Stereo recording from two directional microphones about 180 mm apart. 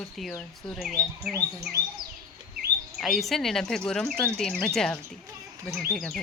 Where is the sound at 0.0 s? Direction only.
Centre (ahead or behind).